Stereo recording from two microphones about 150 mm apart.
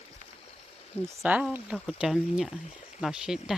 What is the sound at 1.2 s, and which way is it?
Speech, 10° right (ahead or behind).